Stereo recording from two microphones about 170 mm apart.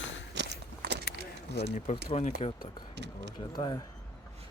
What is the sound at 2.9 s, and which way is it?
Speech, 90° right.